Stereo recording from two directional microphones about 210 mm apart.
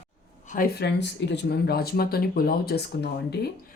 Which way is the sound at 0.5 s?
45° left (ahead or behind).